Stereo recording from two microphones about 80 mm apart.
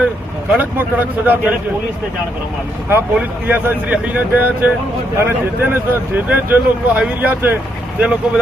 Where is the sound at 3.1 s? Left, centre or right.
Centre.